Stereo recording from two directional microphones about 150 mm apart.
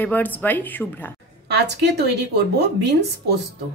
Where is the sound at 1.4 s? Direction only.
90° right.